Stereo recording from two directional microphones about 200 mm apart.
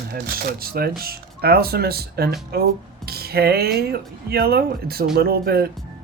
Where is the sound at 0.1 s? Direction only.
50° right (ahead or behind).